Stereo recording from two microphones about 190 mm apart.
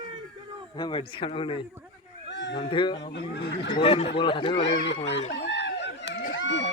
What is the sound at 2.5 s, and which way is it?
Speech, 25° left (ahead or behind).